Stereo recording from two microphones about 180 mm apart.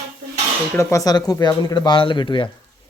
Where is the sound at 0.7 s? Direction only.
15° left (ahead or behind).